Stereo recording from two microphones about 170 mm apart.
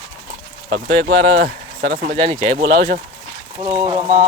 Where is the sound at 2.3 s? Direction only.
30° right (ahead or behind).